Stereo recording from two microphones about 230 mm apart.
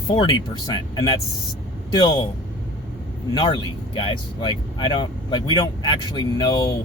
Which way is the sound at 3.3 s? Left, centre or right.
Left.